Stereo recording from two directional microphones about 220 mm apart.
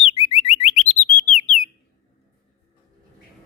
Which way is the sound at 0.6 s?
30° left (ahead or behind).